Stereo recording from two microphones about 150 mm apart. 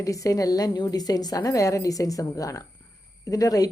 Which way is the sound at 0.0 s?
20° left (ahead or behind).